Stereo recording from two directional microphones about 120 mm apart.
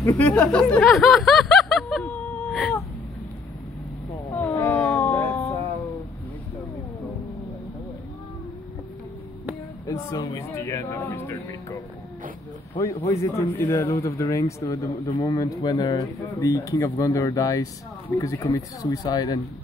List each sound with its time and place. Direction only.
0.0 s snicker: 15° left (ahead or behind)
2.0 s whimper: 10° left (ahead or behind)
4.3 s howl: 15° left (ahead or behind)
5.5 s music: 25° left (ahead or behind)
9.8 s speech: 30° left (ahead or behind)
13.0 s a man's voice: 20° left (ahead or behind)
15.0 s a man's voice: 40° left (ahead or behind)
15.3 s speech: 30° left (ahead or behind)